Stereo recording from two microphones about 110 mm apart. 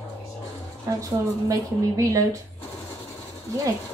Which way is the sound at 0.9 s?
35° right (ahead or behind).